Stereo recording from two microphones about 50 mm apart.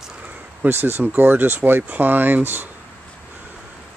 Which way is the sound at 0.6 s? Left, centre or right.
Right.